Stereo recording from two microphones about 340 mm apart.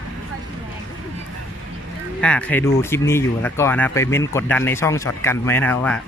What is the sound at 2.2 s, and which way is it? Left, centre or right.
Speech, centre.